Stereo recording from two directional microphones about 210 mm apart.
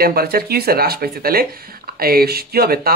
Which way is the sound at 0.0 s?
45° right (ahead or behind).